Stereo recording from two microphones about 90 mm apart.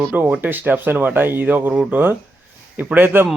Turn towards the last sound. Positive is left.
turn(degrees=-20)  # may be behind; listen again after turning